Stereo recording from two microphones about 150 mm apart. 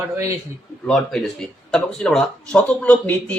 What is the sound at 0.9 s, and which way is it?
Speech, 5° left (ahead or behind).